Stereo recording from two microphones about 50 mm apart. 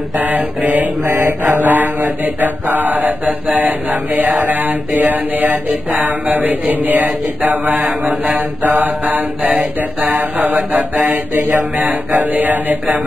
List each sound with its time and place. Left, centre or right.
0.7 s mantra: right